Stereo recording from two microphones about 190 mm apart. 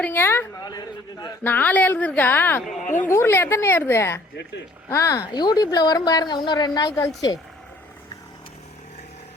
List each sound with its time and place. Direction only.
0.0 s a woman's voice: 10° left (ahead or behind)
1.5 s a woman's voice: 10° left (ahead or behind)